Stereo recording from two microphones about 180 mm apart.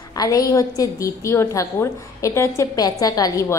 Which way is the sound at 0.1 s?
20° left (ahead or behind).